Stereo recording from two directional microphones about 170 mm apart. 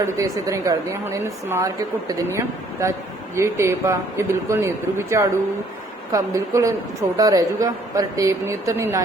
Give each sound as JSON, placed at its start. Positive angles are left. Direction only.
{"t": 0.0, "sound": "a woman's voice", "side_deg": -20}